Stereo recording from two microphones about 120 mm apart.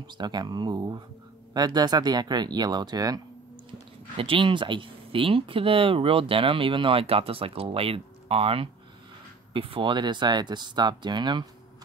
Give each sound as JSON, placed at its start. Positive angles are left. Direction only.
{"t": 0.0, "sound": "speech", "side_deg": -35}
{"t": 4.2, "sound": "speech", "side_deg": -45}